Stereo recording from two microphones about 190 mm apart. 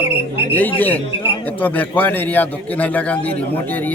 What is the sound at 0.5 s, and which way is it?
A man's voice, 10° left (ahead or behind).